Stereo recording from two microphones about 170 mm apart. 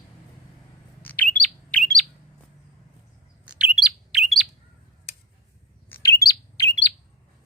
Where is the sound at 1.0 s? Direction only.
10° left (ahead or behind).